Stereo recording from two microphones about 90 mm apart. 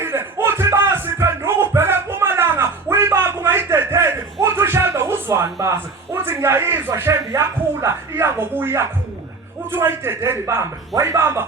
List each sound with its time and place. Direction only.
0.0 s music: 30° right (ahead or behind)
5.7 s a man's voice: 25° right (ahead or behind)